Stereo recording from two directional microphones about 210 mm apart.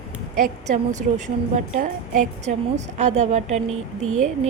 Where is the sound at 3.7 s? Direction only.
90° right.